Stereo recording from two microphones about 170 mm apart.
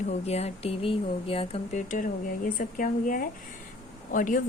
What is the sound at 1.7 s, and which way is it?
A woman's voice, 50° left (ahead or behind).